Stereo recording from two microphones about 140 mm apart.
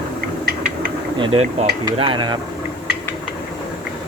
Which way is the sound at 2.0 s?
35° right (ahead or behind).